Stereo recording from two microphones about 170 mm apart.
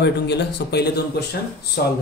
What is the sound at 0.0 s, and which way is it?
Speech, 80° left.